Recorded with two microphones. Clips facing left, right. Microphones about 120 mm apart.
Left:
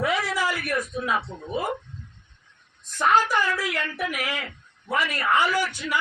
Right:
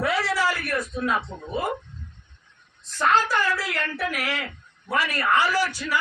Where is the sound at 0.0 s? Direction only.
15° left (ahead or behind).